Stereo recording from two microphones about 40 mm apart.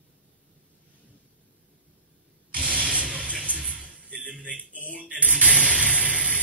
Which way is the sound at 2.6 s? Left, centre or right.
Right.